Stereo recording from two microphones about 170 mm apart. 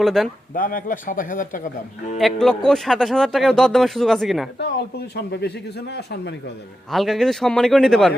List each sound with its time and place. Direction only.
0.0 s speech: centre (ahead or behind)
0.5 s a man's voice: 55° left (ahead or behind)
2.1 s speech: centre (ahead or behind)
4.5 s a man's voice: 75° left (ahead or behind)
6.9 s speech: centre (ahead or behind)